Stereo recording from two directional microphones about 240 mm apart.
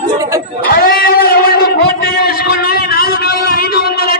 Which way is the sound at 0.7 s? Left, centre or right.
Left.